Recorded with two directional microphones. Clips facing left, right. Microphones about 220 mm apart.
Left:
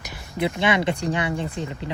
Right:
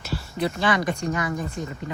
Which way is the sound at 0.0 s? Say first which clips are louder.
Even; 20° left (ahead or behind).